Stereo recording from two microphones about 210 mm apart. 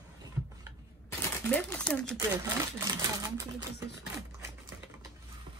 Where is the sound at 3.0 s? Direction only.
15° right (ahead or behind).